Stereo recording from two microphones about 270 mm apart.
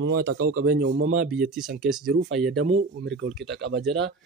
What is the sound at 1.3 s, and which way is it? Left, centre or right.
Speech, centre.